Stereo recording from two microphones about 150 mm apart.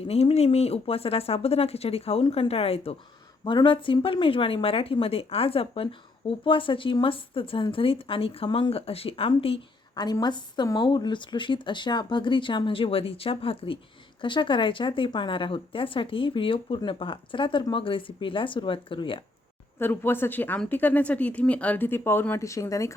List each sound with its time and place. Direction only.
0.0 s speech: 40° left (ahead or behind)
3.4 s speech: 30° left (ahead or behind)
9.9 s speech: 25° left (ahead or behind)
19.8 s speech: 15° left (ahead or behind)